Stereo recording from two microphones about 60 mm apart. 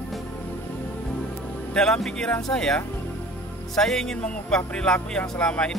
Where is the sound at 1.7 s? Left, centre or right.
Centre.